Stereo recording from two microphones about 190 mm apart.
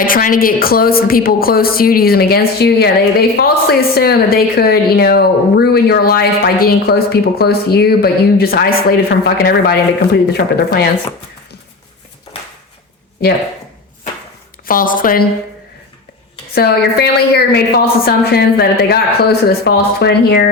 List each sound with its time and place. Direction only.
0.0 s a woman's voice: 45° left (ahead or behind)
14.7 s speech: 45° left (ahead or behind)
16.6 s a woman's voice: 55° left (ahead or behind)